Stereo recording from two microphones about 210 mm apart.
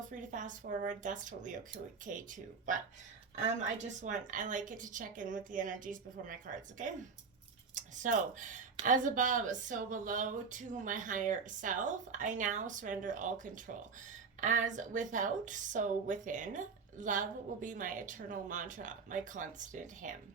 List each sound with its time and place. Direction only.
0.1 s a woman's voice: 40° right (ahead or behind)
4.0 s a woman's voice: 35° right (ahead or behind)